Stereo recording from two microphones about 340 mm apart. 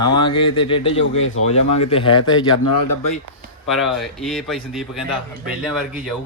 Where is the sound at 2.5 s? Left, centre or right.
Left.